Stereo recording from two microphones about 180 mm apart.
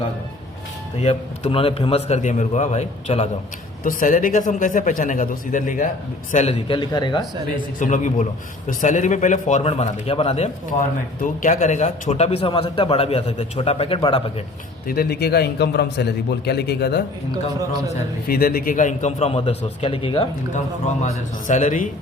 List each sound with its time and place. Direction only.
0.9 s a man's voice: 35° left (ahead or behind)
3.8 s speech: 50° left (ahead or behind)
6.3 s speech: 35° left (ahead or behind)
7.8 s a man's voice: 45° left (ahead or behind); by 14.2 s 30° left (ahead or behind)
14.8 s a man's voice: 60° left (ahead or behind)
18.3 s a man's voice: 55° left (ahead or behind); by 20.2 s 30° left (ahead or behind)
21.0 s speech: 45° left (ahead or behind)